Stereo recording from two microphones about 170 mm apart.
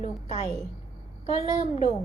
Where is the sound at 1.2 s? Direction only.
35° left (ahead or behind).